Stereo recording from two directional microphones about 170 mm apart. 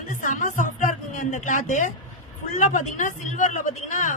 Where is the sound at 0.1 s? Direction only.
50° left (ahead or behind).